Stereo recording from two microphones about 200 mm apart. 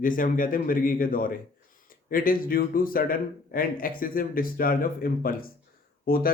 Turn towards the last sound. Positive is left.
turn(degrees=45)  # may be behind; listen again after turning